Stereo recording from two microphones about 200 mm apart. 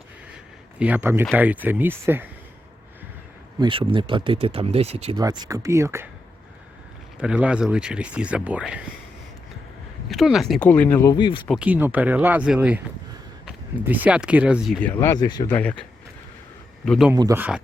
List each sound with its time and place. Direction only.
0.8 s speech: 10° right (ahead or behind)
3.6 s speech: 25° right (ahead or behind)
5.1 s speech: 20° right (ahead or behind)
7.2 s speech: 5° right (ahead or behind)
10.1 s speech: centre (ahead or behind); by 11.4 s 25° left (ahead or behind)
11.4 s speech: 5° right (ahead or behind)
14.8 s speech: 10° left (ahead or behind)
15.4 s speech: 5° left (ahead or behind)
17.1 s speech: 15° right (ahead or behind)